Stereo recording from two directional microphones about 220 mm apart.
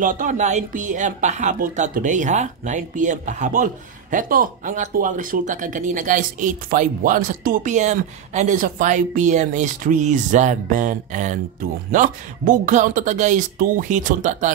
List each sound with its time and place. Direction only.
0.0 s speech: 35° right (ahead or behind)